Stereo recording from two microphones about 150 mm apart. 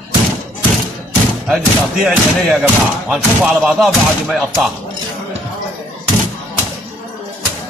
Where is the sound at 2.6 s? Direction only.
5° right (ahead or behind).